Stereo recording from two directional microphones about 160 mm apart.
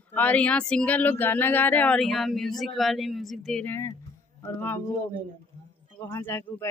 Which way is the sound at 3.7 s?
20° left (ahead or behind).